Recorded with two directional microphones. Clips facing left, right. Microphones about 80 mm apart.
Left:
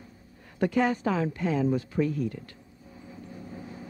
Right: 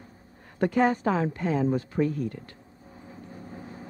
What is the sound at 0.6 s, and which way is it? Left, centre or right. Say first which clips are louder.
Speech: right 2 dB; right.